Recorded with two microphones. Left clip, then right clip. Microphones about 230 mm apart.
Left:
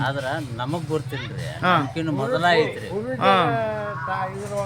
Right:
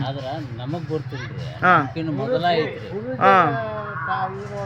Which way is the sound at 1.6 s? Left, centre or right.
Centre.